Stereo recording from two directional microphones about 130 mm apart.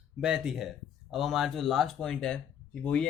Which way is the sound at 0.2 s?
5° right (ahead or behind).